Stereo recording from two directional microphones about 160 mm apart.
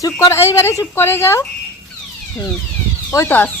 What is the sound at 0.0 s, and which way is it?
A woman's voice, 15° left (ahead or behind).